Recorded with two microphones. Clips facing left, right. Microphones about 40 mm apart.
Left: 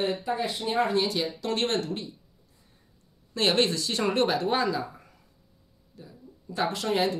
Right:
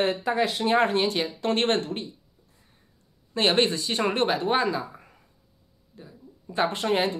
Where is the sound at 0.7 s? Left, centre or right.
Right.